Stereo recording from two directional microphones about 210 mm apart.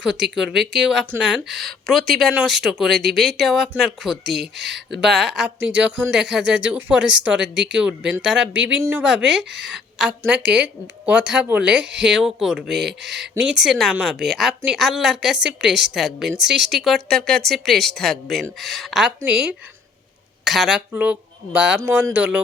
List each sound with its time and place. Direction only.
0.3 s speech: centre (ahead or behind)
4.4 s speech: 55° right (ahead or behind)
4.7 s speech: centre (ahead or behind)